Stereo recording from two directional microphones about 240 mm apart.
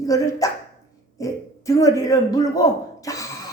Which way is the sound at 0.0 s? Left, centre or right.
Centre.